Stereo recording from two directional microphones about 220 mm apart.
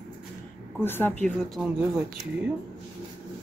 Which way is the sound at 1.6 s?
5° right (ahead or behind).